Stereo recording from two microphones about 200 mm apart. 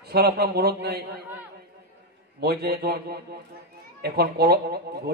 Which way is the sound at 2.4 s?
50° right (ahead or behind).